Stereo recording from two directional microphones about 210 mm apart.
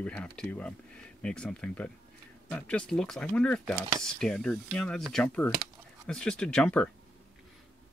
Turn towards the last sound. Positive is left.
turn(degrees=5)  # may be behind; listen again after turning